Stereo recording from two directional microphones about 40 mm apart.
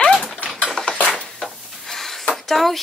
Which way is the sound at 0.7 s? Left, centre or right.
Left.